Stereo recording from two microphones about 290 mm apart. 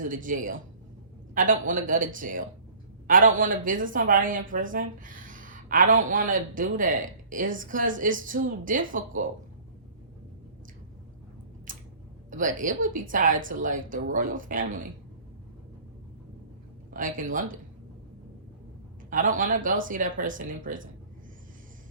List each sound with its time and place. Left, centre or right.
0.0 s speech: right
11.7 s a sound: right
12.3 s speech: right
16.9 s speech: right
19.1 s speech: right